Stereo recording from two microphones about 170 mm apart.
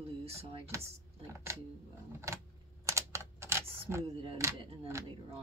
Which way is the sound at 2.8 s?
15° right (ahead or behind).